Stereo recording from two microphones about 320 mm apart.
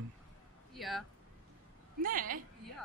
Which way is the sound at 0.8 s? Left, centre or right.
Centre.